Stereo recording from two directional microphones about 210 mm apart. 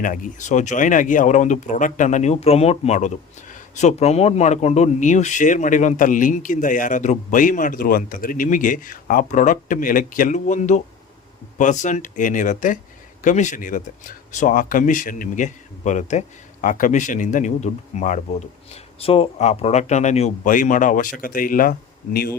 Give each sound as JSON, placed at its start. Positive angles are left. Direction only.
{"t": 0.0, "sound": "speech", "side_deg": 40}